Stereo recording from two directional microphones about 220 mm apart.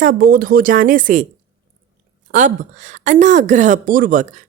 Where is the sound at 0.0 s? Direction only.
40° right (ahead or behind).